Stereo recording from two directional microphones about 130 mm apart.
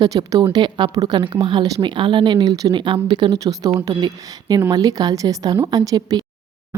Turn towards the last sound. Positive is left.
turn(degrees=-30)  # may be behind; listen again after turning